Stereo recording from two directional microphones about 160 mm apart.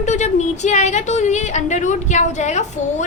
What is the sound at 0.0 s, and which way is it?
A woman's voice, 50° left (ahead or behind).